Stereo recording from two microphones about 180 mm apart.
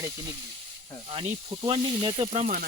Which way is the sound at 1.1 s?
30° right (ahead or behind).